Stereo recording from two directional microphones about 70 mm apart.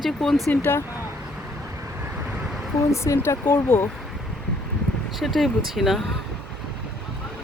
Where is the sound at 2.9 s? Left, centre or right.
Left.